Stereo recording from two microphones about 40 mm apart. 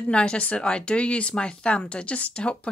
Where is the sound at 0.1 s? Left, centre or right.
Left.